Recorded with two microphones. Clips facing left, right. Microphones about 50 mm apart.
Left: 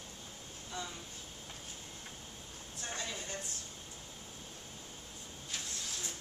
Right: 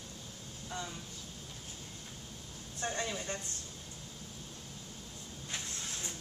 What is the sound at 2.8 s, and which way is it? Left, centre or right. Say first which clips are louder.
Speech: right 5 dB; right.